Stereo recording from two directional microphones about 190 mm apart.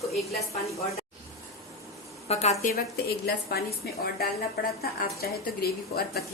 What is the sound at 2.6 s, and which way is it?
A woman's voice, 55° left (ahead or behind).